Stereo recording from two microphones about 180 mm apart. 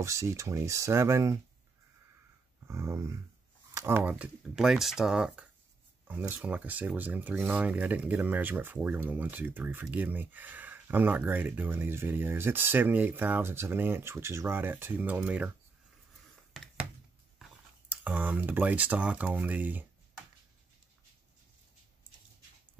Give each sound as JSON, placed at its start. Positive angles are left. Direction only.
{"t": 0.0, "sound": "speech", "side_deg": -15}
{"t": 2.7, "sound": "speech", "side_deg": -15}
{"t": 17.4, "sound": "speech", "side_deg": -10}